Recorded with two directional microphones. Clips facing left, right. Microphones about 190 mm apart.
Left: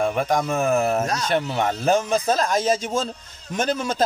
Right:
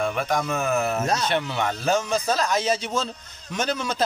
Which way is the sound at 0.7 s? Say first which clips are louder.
Left 5 dB; 30° left (ahead or behind).